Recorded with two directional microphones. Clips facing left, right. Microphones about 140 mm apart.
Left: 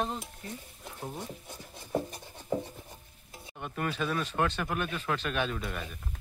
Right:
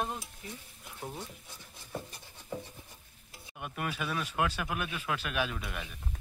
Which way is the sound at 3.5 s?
10° right (ahead or behind).